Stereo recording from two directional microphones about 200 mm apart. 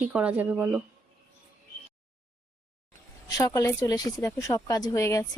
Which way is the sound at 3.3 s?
20° left (ahead or behind).